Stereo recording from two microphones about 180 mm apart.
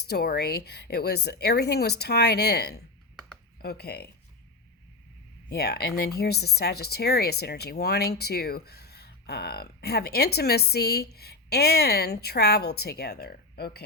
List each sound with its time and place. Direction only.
0.1 s speech: 60° left (ahead or behind)
5.5 s speech: 60° left (ahead or behind)